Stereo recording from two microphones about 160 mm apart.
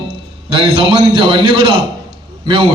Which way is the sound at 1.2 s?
30° right (ahead or behind).